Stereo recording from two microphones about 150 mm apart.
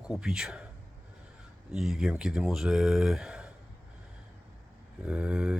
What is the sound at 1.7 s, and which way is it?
Speech, 5° right (ahead or behind).